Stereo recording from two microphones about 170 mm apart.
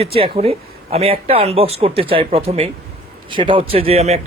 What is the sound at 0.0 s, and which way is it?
Speech, 35° right (ahead or behind).